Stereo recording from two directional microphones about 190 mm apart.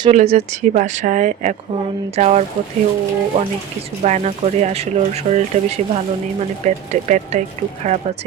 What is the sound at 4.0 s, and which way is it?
Speech, 40° right (ahead or behind).